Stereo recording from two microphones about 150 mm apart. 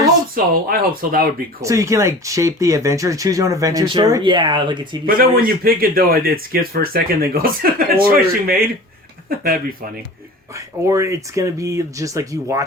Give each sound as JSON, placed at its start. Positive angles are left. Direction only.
{"t": 0.3, "sound": "speech", "side_deg": -75}
{"t": 1.6, "sound": "speech", "side_deg": -20}
{"t": 5.0, "sound": "a man's voice", "side_deg": -75}
{"t": 10.5, "sound": "speech", "side_deg": -20}